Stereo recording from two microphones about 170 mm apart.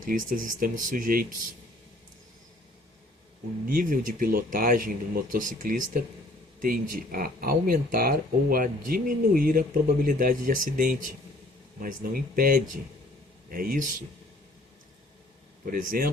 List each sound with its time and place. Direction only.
0.0 s speech: 50° right (ahead or behind)
3.7 s speech: 55° right (ahead or behind)
15.6 s speech: 55° right (ahead or behind)